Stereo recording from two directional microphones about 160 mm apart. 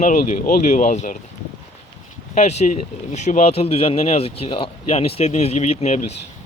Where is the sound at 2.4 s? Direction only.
45° left (ahead or behind).